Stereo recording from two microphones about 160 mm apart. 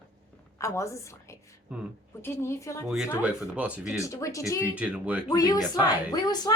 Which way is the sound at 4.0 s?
20° left (ahead or behind).